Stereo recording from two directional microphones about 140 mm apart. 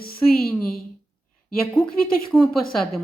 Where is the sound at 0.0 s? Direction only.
90° left.